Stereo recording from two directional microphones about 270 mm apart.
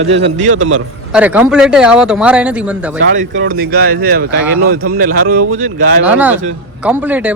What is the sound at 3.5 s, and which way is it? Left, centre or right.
Speech, right.